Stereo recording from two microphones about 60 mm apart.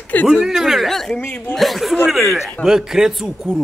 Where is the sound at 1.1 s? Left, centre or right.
Left.